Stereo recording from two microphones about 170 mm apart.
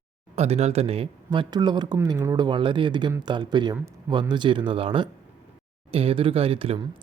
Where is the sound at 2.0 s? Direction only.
15° right (ahead or behind).